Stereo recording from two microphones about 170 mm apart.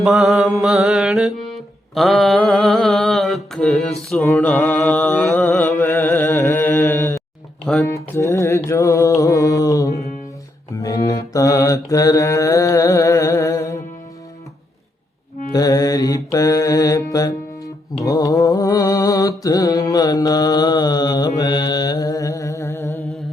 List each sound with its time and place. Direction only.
0.0 s mantra: centre (ahead or behind)
7.6 s speech: 5° left (ahead or behind)
7.9 s music: 15° left (ahead or behind)
10.8 s mantra: 20° left (ahead or behind)
15.5 s mantra: 20° left (ahead or behind)